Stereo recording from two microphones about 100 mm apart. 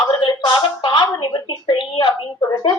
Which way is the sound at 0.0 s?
55° left (ahead or behind).